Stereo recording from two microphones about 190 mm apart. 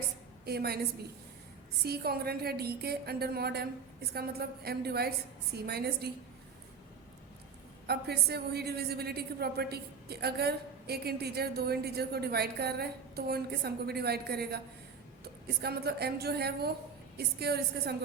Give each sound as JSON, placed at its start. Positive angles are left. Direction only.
{"t": 0.4, "sound": "a woman's voice", "side_deg": -55}
{"t": 1.8, "sound": "a woman's voice", "side_deg": -55}
{"t": 7.9, "sound": "a woman's voice", "side_deg": -55}